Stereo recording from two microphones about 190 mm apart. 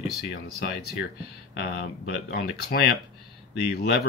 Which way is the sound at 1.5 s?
60° left (ahead or behind).